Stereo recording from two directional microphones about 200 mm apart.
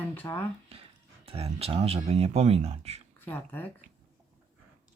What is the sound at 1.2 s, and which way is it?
Speech, 30° right (ahead or behind).